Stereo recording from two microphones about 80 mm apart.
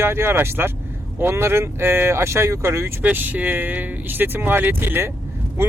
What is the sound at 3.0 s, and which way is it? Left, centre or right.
Speech, right.